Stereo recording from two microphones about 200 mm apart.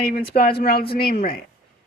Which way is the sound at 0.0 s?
50° left (ahead or behind).